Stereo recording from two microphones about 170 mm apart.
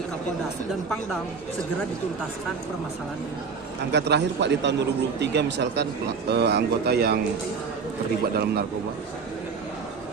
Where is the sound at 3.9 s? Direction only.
90° right.